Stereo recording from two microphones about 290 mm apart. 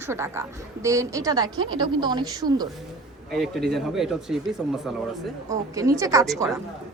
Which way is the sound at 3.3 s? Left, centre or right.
Centre.